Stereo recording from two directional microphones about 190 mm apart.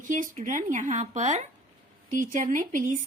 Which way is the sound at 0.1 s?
45° right (ahead or behind).